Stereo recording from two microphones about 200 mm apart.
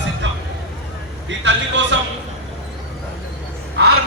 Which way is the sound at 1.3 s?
65° right (ahead or behind).